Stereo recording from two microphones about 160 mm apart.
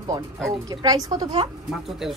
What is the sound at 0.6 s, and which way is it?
Speech, 25° right (ahead or behind).